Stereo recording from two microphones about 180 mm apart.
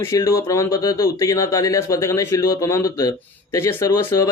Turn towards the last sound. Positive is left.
turn(degrees=15)  # may be behind; listen again after turning